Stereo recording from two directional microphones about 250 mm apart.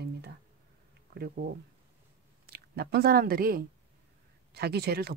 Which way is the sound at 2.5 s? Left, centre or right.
Right.